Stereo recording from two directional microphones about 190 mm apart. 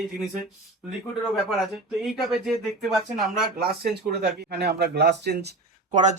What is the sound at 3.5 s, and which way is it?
Speech, 55° right (ahead or behind).